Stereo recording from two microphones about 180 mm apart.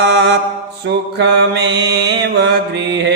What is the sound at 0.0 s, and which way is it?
Mantra, 75° right (ahead or behind).